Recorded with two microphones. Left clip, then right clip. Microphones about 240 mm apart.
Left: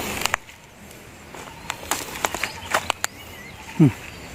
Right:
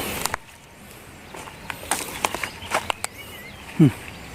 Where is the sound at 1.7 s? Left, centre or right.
Centre.